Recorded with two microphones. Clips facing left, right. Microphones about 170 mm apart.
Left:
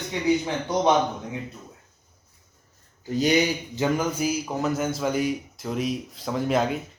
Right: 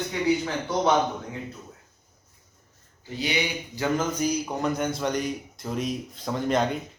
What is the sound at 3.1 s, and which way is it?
Speech, 45° left (ahead or behind).